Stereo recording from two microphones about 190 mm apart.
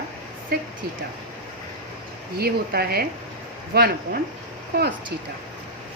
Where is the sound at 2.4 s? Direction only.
55° right (ahead or behind).